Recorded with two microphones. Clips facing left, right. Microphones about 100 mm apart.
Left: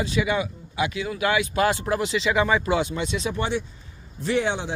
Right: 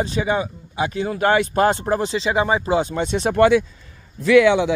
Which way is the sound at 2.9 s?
45° right (ahead or behind).